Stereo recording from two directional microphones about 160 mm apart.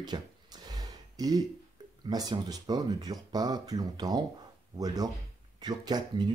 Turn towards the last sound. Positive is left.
turn(degrees=-25)  # may be behind; listen again after turning